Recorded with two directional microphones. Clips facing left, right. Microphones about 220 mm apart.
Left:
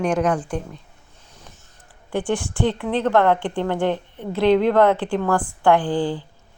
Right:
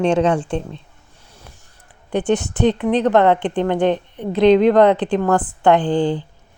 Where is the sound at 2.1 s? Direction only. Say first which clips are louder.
Right 5 dB; 20° right (ahead or behind).